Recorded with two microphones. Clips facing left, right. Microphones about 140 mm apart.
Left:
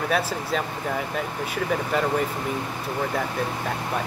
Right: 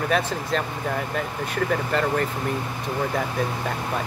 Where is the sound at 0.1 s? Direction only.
5° left (ahead or behind).